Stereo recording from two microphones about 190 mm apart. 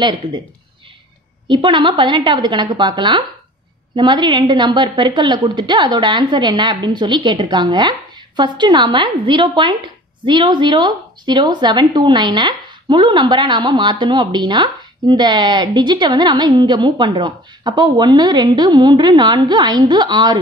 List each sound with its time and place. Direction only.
1.5 s speech: 25° right (ahead or behind)